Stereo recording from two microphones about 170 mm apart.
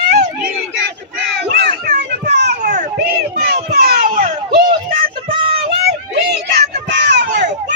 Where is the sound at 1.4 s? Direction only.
75° right (ahead or behind).